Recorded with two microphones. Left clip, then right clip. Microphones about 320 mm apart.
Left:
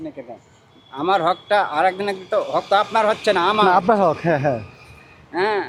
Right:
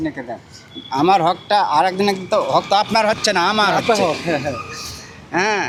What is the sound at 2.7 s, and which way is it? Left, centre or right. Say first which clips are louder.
Speech: left 2 dB; right.